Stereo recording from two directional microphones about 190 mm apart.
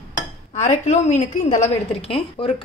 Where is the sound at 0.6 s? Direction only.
40° left (ahead or behind).